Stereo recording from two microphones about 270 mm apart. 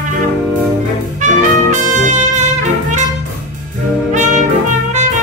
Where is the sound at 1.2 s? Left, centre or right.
Right.